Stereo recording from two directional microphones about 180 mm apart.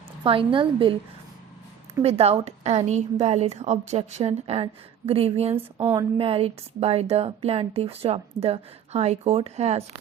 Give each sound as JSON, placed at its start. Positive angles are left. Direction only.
{"t": 0.2, "sound": "a woman's voice", "side_deg": -30}
{"t": 2.0, "sound": "a woman's voice", "side_deg": -35}
{"t": 5.7, "sound": "a woman's voice", "side_deg": -15}
{"t": 6.1, "sound": "a woman's voice", "side_deg": -30}